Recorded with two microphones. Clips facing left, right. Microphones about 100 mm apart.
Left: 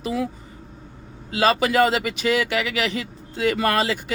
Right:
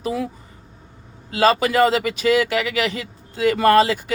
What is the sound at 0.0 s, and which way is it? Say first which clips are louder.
Speech: right 1 dB; 45° right (ahead or behind).